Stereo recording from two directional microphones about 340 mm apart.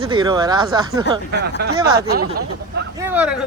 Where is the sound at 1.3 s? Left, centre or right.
Right.